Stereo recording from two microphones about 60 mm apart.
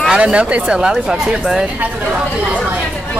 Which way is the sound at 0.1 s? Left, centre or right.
Centre.